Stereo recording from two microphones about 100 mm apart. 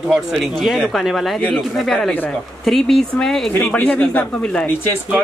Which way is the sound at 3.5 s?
25° left (ahead or behind).